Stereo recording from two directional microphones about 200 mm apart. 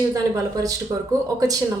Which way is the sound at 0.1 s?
15° right (ahead or behind).